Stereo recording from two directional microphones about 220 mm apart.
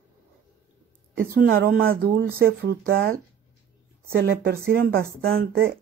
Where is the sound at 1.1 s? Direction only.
40° right (ahead or behind).